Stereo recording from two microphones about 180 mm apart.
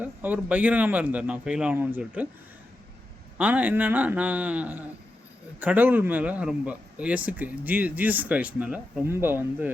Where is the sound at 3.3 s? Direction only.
10° right (ahead or behind).